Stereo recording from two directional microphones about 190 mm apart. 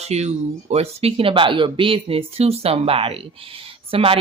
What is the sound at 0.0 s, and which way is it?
Speech, 35° right (ahead or behind).